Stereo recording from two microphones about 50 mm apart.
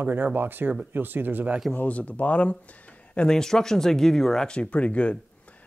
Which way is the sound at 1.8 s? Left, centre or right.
Left.